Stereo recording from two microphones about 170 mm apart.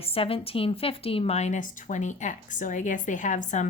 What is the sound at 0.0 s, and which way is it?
A woman's voice, 35° left (ahead or behind).